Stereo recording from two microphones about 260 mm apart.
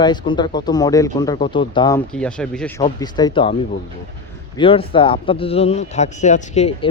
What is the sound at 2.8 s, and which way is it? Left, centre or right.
Speech, centre.